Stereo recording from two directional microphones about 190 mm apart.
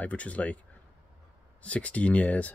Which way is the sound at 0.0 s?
5° left (ahead or behind).